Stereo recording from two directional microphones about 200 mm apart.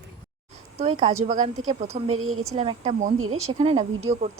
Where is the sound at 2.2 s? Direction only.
90° right.